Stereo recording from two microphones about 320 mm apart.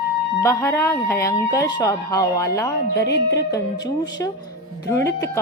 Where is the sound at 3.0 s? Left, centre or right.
Left.